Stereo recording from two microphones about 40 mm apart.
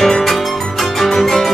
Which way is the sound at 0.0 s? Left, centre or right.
Centre.